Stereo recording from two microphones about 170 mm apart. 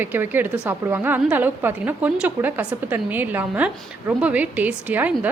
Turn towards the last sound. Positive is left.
turn(degrees=-10)  # may be behind; listen again after turning